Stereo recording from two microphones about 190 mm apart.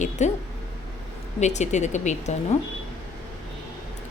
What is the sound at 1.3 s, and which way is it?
A woman's voice, 35° left (ahead or behind).